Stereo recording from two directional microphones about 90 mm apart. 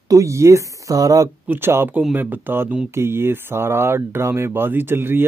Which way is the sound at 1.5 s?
25° right (ahead or behind).